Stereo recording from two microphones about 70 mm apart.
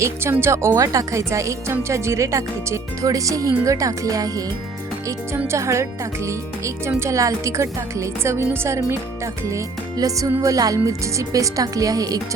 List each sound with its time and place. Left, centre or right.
0.0 s speech: right
5.5 s speech: right